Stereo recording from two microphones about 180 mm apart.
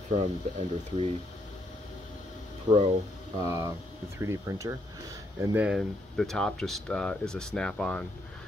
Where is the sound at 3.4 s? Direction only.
20° right (ahead or behind).